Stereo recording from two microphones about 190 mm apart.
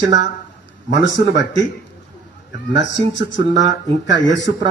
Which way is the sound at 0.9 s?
70° left (ahead or behind).